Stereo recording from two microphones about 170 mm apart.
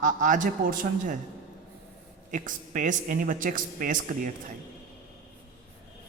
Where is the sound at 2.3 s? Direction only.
50° right (ahead or behind).